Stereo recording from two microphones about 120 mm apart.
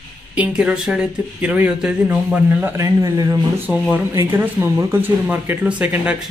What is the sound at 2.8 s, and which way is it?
A man's voice, 30° right (ahead or behind).